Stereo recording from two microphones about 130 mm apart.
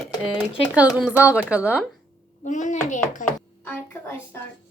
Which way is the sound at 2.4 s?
75° left (ahead or behind).